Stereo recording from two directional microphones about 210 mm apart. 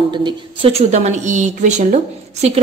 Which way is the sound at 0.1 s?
25° right (ahead or behind).